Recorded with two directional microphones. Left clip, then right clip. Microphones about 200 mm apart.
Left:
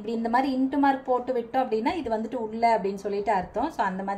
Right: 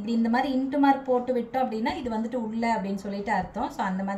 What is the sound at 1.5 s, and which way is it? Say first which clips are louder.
A woman's voice: left 2 dB; 35° left (ahead or behind).